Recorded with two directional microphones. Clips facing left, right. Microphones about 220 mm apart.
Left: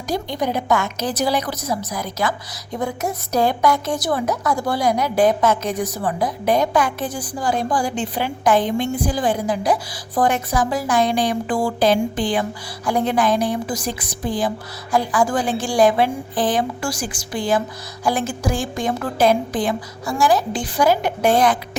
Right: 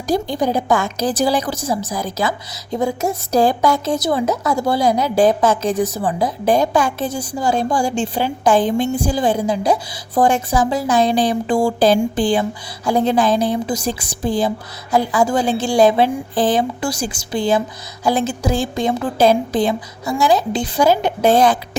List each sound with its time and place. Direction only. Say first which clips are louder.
0.1 s a woman's voice: right 4 dB; 30° right (ahead or behind)